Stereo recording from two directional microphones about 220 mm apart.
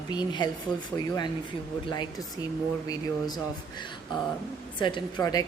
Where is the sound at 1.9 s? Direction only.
20° left (ahead or behind).